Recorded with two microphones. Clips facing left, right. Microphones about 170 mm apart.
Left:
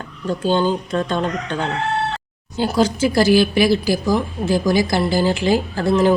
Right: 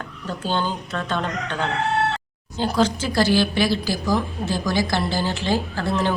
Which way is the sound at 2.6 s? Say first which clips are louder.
Left 4 dB; 10° left (ahead or behind).